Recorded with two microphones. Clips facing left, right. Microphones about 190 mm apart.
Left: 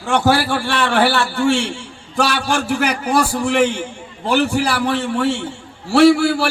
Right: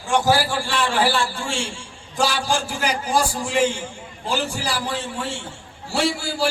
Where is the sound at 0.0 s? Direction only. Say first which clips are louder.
Left 3 dB; 65° left (ahead or behind).